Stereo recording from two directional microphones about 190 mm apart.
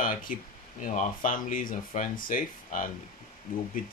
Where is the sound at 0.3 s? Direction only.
45° left (ahead or behind).